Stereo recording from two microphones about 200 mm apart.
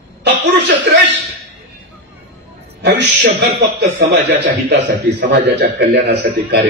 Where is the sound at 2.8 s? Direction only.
60° right (ahead or behind).